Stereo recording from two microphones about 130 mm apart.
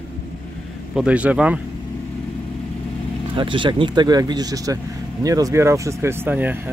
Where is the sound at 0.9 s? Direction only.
10° right (ahead or behind).